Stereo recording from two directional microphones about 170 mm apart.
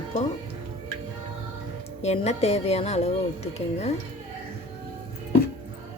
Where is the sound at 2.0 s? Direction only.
40° left (ahead or behind).